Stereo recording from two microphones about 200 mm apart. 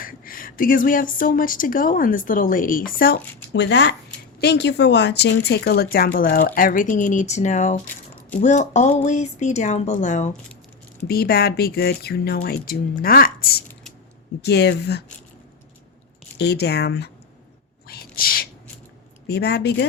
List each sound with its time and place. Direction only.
0.0 s a woman's voice: 45° left (ahead or behind)
3.5 s a woman's voice: 60° left (ahead or behind); by 10.3 s 35° left (ahead or behind)
11.1 s a woman's voice: 50° left (ahead or behind)
16.4 s speech: 55° left (ahead or behind)
17.8 s a sound: 50° left (ahead or behind)
19.3 s speech: 55° left (ahead or behind)